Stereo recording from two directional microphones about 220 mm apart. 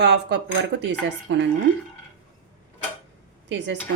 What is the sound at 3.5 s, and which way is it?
Speech, 55° right (ahead or behind).